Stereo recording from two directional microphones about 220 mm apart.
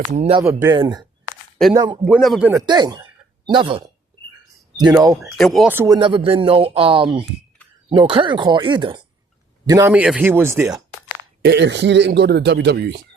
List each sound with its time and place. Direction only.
0.1 s speech: 30° right (ahead or behind)
0.4 s speech: 10° right (ahead or behind)
2.0 s speech: centre (ahead or behind)
2.5 s speech: 15° right (ahead or behind)
5.4 s speech: centre (ahead or behind)
6.0 s speech: 25° right (ahead or behind)
11.4 s speech: 55° right (ahead or behind)